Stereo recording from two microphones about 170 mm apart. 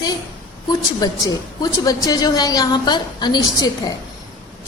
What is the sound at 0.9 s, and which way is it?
A woman's voice, 20° left (ahead or behind).